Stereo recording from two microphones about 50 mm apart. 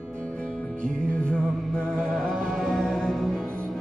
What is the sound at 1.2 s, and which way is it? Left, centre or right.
Music, centre.